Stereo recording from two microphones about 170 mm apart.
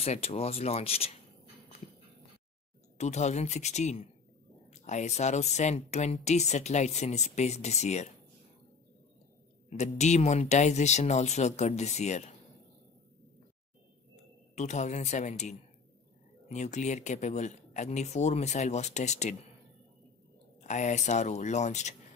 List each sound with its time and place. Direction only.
0.0 s speech: 35° left (ahead or behind)
3.0 s speech: 40° left (ahead or behind)
9.7 s speech: 40° left (ahead or behind)
14.5 s speech: 45° left (ahead or behind)
20.6 s speech: 45° left (ahead or behind)